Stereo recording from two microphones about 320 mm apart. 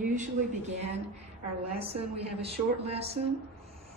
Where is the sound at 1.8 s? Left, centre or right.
Centre.